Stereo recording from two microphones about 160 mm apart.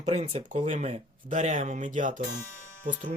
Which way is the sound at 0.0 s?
45° right (ahead or behind).